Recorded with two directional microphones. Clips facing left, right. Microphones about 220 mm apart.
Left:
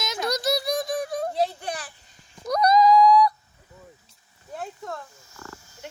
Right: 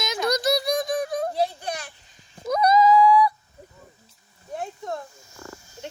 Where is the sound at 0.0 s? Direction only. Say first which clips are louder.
Right 3 dB; centre (ahead or behind).